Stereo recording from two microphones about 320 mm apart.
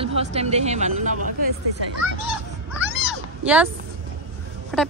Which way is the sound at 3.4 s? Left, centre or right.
Centre.